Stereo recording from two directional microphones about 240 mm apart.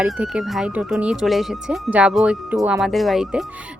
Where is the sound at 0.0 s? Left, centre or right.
Centre.